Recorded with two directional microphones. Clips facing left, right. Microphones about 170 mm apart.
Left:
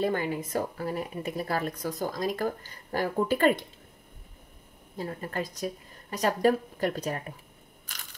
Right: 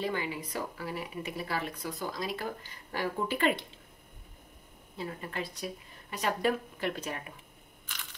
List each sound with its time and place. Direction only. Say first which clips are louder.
0.0 s speech: left 6 dB; 50° left (ahead or behind)
4.9 s speech: left 4 dB; 45° left (ahead or behind)